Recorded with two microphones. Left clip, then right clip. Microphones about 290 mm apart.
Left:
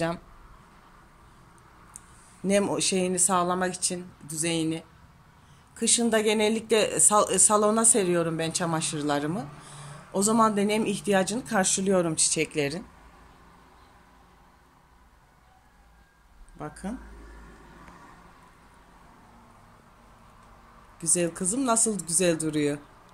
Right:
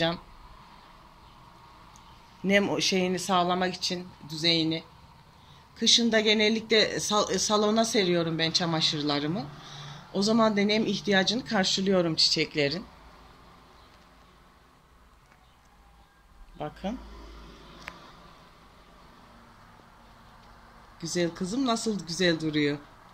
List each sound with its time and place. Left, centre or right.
2.4 s speech: centre
16.5 s speech: centre
21.0 s speech: centre